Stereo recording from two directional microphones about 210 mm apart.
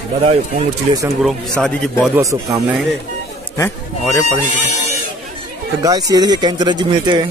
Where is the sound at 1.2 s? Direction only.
5° left (ahead or behind).